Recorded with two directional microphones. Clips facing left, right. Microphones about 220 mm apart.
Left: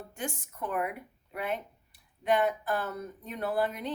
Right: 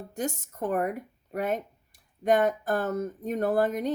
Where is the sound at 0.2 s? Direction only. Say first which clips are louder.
Right 6 dB; 40° right (ahead or behind).